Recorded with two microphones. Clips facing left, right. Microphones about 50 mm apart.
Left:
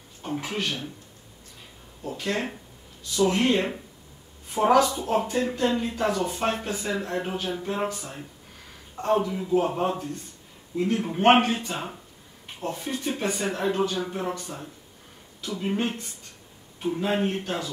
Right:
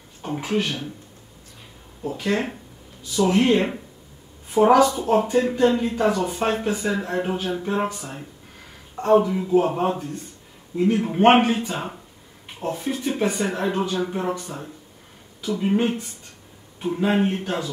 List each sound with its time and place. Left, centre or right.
0.2 s speech: centre
2.0 s a woman's voice: centre
4.9 s speech: right
5.2 s speech: centre
8.9 s speech: centre
11.1 s speech: centre